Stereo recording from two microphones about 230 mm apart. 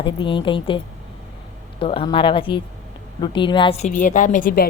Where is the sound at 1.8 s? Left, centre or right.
Left.